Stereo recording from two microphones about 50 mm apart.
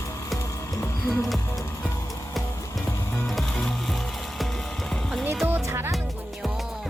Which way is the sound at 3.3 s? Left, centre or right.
Centre.